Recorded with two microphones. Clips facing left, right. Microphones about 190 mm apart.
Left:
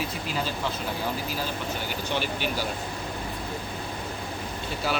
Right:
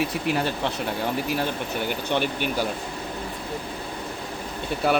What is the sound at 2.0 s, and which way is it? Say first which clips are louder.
Speech: right 2 dB; 55° right (ahead or behind).